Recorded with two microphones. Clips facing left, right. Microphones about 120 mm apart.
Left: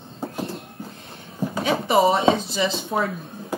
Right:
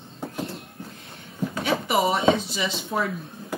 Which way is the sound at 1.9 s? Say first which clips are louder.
Left 4 dB; 30° left (ahead or behind).